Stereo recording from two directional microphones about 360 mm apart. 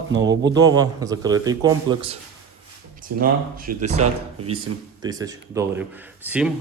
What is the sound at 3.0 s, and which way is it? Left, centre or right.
Speech, right.